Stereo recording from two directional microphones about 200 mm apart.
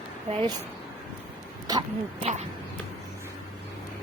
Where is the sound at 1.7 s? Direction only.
20° right (ahead or behind).